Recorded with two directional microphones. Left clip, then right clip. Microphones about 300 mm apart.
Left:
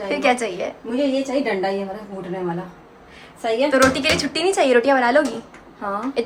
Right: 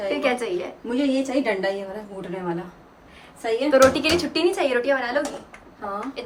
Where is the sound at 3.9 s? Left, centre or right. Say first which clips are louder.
Left 2 dB; centre.